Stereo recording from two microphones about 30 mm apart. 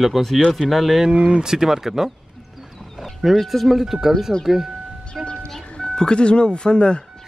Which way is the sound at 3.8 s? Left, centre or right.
Centre.